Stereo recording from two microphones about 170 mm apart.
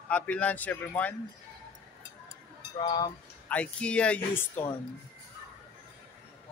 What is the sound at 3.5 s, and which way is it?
Speech, 5° left (ahead or behind).